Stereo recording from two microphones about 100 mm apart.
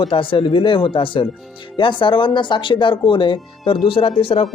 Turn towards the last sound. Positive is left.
turn(degrees=65)  # may be behind; listen again after turning